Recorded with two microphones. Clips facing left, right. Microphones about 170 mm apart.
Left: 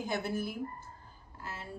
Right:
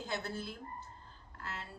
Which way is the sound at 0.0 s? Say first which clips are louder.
Left 6 dB; 15° left (ahead or behind).